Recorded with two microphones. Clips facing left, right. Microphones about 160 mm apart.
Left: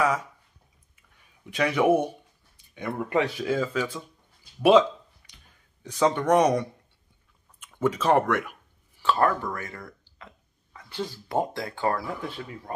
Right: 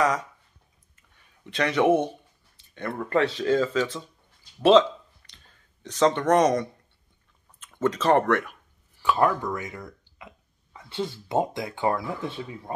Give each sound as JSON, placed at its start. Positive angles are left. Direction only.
{"t": 0.9, "sound": "speech", "side_deg": 10}
{"t": 5.3, "sound": "a sound", "side_deg": 10}
{"t": 7.6, "sound": "speech", "side_deg": 10}
{"t": 9.0, "sound": "speech", "side_deg": -15}